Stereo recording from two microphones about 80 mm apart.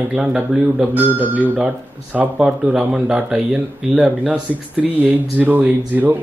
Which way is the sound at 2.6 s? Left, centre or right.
Centre.